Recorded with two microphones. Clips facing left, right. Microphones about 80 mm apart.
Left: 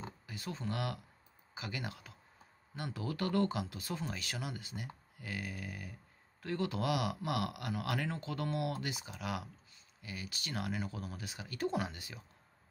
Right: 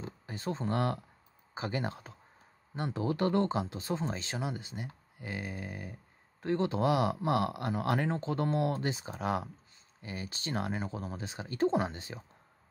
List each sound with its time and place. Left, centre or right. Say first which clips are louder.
0.3 s speech: right 8 dB; right